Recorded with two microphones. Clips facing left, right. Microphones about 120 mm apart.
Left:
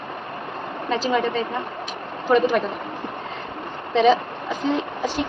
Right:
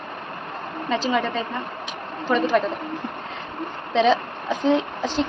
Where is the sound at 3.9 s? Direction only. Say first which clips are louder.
Left 2 dB; 5° left (ahead or behind).